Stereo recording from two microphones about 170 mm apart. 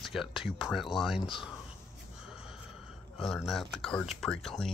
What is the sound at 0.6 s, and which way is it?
Speech, centre (ahead or behind).